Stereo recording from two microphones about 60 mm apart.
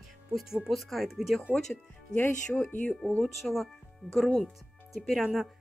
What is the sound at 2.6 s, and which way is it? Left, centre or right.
Speech, left.